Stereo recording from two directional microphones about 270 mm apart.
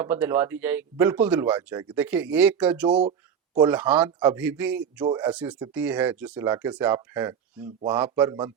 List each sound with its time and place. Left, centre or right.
0.0 s speech: centre
3.0 s a sound: right
3.6 s speech: centre
5.0 s a man's voice: centre
5.3 s a man's voice: centre